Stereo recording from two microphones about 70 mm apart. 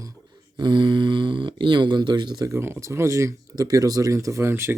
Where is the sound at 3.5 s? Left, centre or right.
Right.